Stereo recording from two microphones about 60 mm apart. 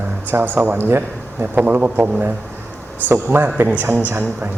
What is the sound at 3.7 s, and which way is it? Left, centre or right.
Speech, right.